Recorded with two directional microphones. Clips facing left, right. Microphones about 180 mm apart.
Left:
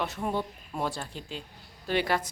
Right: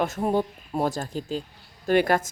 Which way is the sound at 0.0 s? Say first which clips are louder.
Right 7 dB; 45° right (ahead or behind).